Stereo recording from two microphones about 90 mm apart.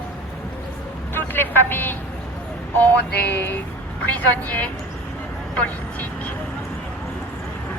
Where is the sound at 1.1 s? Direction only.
25° left (ahead or behind).